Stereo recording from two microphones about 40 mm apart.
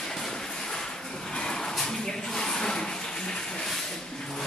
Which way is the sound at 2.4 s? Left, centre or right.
Centre.